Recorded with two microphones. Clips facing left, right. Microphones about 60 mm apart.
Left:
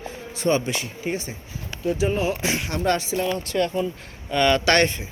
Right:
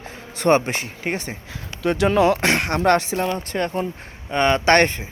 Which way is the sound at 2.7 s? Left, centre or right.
Right.